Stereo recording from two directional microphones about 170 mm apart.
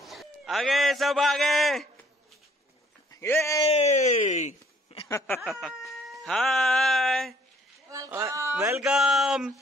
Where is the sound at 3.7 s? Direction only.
40° left (ahead or behind).